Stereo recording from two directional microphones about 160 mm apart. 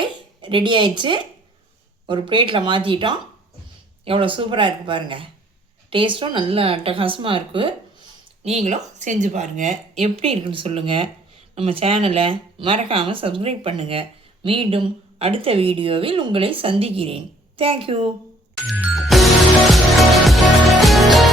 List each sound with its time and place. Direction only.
0.0 s speech: 30° right (ahead or behind)
8.4 s speech: 45° right (ahead or behind)
10.0 s speech: 35° right (ahead or behind)
18.7 s music: 5° right (ahead or behind)